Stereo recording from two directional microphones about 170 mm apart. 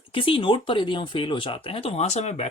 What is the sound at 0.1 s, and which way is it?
Speech, 30° left (ahead or behind).